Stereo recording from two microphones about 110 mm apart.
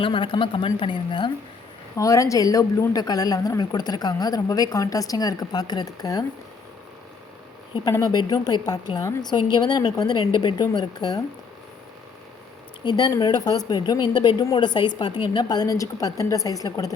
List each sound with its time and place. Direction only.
0.0 s a woman's voice: 50° left (ahead or behind)
2.0 s speech: 30° left (ahead or behind)
7.9 s speech: 35° left (ahead or behind)
12.8 s speech: 40° left (ahead or behind)